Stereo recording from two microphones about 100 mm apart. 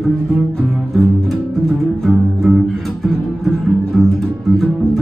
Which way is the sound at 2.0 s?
Centre (ahead or behind).